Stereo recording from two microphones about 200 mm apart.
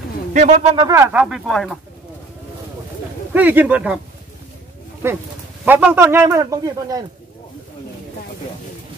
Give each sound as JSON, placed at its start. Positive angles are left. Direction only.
{"t": 0.3, "sound": "speech", "side_deg": -35}
{"t": 0.7, "sound": "a man's voice", "side_deg": -15}
{"t": 3.3, "sound": "a man's voice", "side_deg": -10}
{"t": 5.0, "sound": "a man's voice", "side_deg": -10}